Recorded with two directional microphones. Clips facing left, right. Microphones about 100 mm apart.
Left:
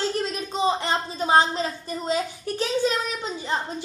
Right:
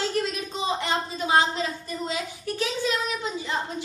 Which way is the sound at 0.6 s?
35° left (ahead or behind).